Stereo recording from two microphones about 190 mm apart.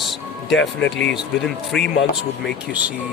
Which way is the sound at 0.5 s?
75° left (ahead or behind).